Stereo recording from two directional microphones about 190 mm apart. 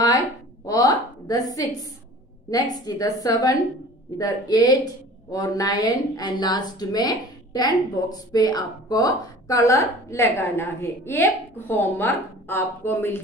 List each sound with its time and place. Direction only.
0.7 s a woman's voice: 20° left (ahead or behind)